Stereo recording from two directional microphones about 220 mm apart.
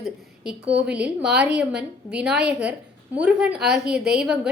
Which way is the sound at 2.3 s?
50° right (ahead or behind).